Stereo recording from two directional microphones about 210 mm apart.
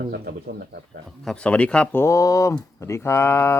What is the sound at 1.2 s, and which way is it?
Speech, 5° left (ahead or behind).